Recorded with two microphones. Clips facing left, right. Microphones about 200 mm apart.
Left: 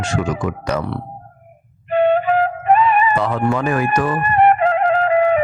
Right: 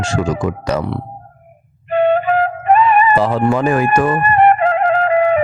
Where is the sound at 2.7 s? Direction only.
60° right (ahead or behind).